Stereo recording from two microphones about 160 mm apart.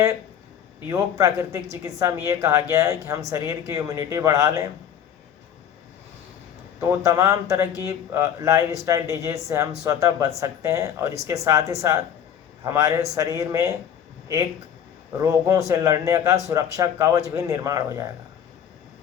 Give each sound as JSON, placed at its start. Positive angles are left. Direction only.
{"t": 0.9, "sound": "speech", "side_deg": -20}
{"t": 6.7, "sound": "speech", "side_deg": -20}
{"t": 15.2, "sound": "speech", "side_deg": -20}